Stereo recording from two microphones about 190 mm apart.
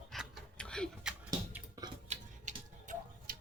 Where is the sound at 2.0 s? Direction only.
40° right (ahead or behind).